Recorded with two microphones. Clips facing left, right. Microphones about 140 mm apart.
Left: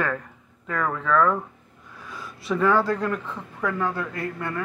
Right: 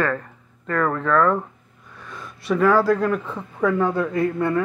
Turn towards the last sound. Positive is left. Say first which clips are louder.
# right 9 dB
turn(degrees=-20)  # may be behind; listen again after turning